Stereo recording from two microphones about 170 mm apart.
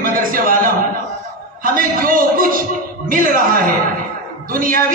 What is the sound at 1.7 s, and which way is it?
A man's voice, 55° right (ahead or behind).